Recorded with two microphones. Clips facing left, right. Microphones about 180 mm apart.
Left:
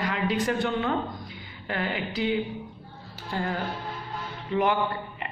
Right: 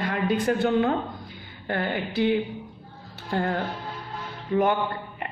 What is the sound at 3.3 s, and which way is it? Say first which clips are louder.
Speech: right 4 dB; 60° right (ahead or behind).